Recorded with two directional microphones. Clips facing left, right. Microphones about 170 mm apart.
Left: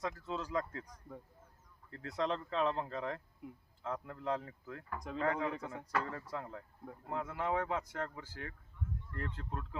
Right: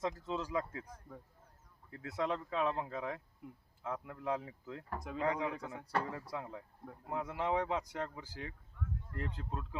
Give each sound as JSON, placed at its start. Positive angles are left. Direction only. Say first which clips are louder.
{"t": 0.0, "sound": "speech", "louder": "right 2 dB", "side_deg": -20}
{"t": 1.9, "sound": "speech", "louder": "even", "side_deg": -5}